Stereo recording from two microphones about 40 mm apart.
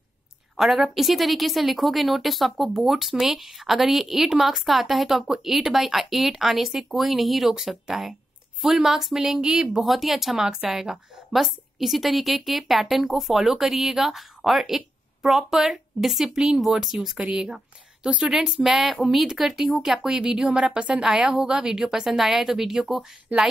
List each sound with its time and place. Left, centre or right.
0.6 s a woman's voice: centre
9.8 s a woman's voice: centre
17.2 s a woman's voice: centre
23.3 s a woman's voice: right